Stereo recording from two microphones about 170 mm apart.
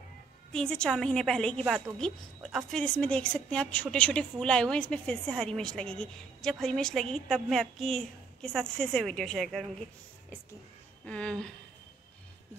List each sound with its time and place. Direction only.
0.5 s a woman's voice: 5° left (ahead or behind)
11.1 s speech: 5° left (ahead or behind)